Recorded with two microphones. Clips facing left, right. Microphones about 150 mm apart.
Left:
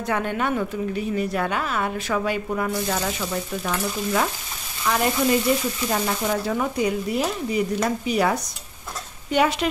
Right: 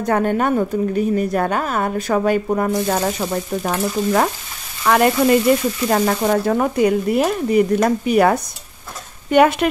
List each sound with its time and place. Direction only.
0.0 s a woman's voice: 45° right (ahead or behind)
4.8 s speech: 60° right (ahead or behind)